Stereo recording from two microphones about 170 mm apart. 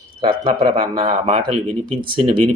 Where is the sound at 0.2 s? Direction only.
30° right (ahead or behind).